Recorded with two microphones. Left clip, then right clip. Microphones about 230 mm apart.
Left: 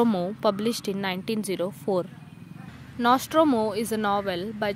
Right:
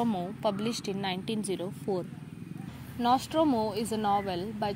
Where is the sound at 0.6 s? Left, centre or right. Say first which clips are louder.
Left 5 dB; left.